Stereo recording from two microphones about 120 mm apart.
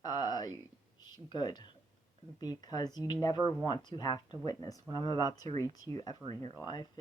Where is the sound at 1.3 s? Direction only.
35° left (ahead or behind).